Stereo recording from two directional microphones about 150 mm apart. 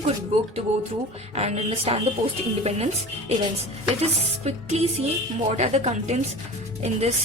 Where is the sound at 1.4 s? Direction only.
45° right (ahead or behind).